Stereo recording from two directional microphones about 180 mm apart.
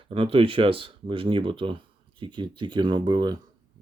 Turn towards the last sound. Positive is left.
turn(degrees=-25)  # may be behind; listen again after turning